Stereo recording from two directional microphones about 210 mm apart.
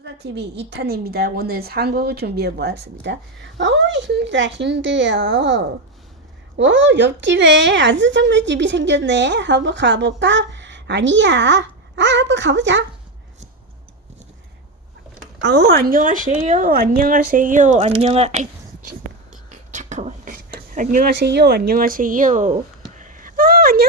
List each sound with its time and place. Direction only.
0.0 s a woman's voice: 55° right (ahead or behind)
15.4 s speech: 55° right (ahead or behind); by 18.4 s 30° right (ahead or behind)
19.7 s a sound: 35° right (ahead or behind)